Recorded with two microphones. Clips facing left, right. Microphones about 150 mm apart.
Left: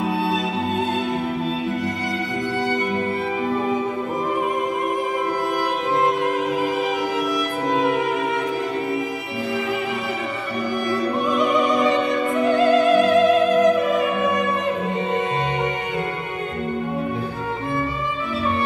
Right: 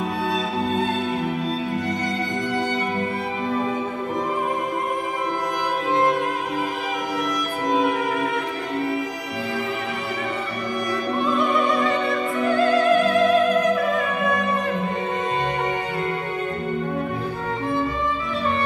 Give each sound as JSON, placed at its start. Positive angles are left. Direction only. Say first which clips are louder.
{"t": 11.2, "sound": "music", "louder": "left 1 dB", "side_deg": 20}